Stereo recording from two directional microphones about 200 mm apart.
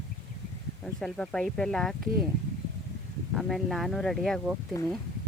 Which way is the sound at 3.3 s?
Centre (ahead or behind).